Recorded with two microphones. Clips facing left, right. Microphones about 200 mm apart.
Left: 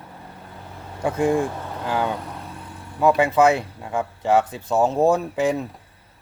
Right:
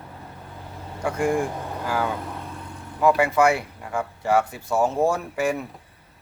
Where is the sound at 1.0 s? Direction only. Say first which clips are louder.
Left 3 dB; 20° left (ahead or behind).